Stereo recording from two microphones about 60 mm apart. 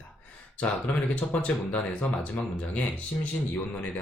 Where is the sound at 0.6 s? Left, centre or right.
Left.